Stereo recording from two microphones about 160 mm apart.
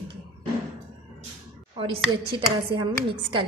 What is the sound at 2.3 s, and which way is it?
A woman's voice, 30° right (ahead or behind).